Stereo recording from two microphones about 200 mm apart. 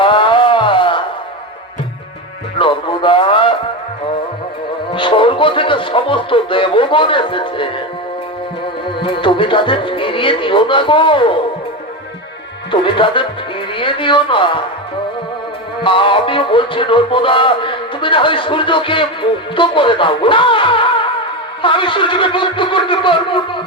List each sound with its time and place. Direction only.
0.0 s music: 25° left (ahead or behind)
2.6 s music: 25° left (ahead or behind)
4.9 s music: 25° left (ahead or behind)
9.0 s music: 25° left (ahead or behind)
12.7 s music: 25° left (ahead or behind)
15.8 s music: 25° left (ahead or behind)